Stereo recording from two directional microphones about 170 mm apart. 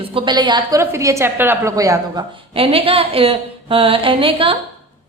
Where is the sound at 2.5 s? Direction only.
35° right (ahead or behind).